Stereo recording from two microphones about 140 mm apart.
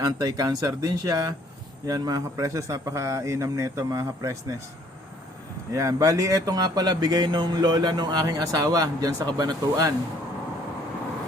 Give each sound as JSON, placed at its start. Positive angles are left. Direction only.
{"t": 0.0, "sound": "speech", "side_deg": -30}
{"t": 5.7, "sound": "speech", "side_deg": -25}